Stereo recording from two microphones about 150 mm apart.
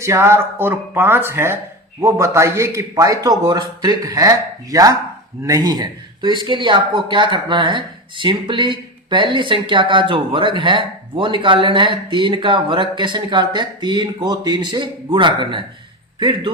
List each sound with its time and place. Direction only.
0.0 s a man's voice: 20° right (ahead or behind)